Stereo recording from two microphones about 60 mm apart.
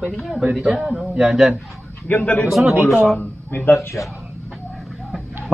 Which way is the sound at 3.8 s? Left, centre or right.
Left.